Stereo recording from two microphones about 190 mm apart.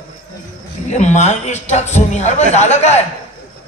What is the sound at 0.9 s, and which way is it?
A man's voice, 35° left (ahead or behind).